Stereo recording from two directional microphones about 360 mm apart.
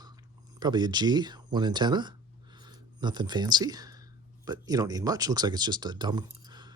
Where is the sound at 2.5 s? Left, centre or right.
Centre.